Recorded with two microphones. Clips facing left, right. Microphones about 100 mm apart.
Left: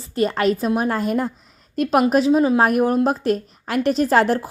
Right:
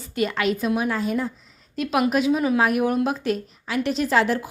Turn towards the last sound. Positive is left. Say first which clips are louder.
# left 4 dB
turn(degrees=45)  # may be behind; listen again after turning